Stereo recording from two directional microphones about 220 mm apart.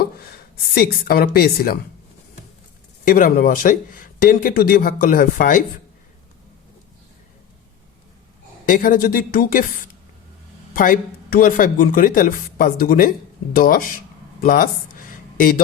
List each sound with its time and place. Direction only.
0.0 s a woman's voice: 45° left (ahead or behind)
3.0 s speech: 35° left (ahead or behind)
8.6 s speech: 40° left (ahead or behind)
14.4 s a sound: 40° left (ahead or behind)